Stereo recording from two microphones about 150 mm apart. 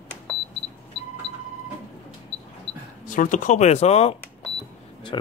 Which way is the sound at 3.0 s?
60° left (ahead or behind).